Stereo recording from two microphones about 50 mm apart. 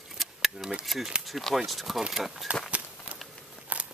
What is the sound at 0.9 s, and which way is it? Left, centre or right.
Speech, centre.